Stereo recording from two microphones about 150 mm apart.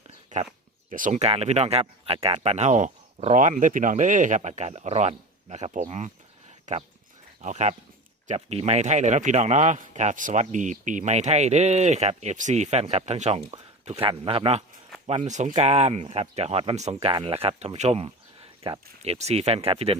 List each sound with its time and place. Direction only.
0.3 s a man's voice: 55° right (ahead or behind); by 20.0 s 40° right (ahead or behind)